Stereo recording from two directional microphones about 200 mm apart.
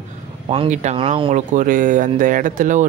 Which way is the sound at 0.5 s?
30° right (ahead or behind).